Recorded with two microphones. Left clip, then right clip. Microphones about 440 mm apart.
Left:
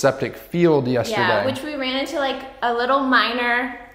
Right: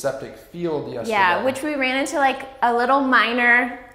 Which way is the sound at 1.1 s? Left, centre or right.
Right.